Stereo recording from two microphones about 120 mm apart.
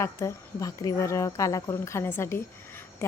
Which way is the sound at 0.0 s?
25° left (ahead or behind).